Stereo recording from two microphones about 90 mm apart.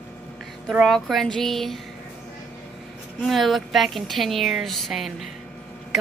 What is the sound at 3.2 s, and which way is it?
A woman's voice, centre (ahead or behind).